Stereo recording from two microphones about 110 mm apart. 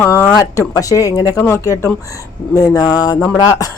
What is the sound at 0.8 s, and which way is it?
Speech, 30° left (ahead or behind).